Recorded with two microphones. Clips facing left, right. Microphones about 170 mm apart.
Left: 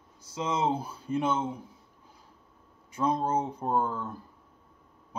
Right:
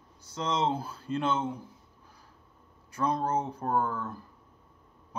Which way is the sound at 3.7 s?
20° left (ahead or behind).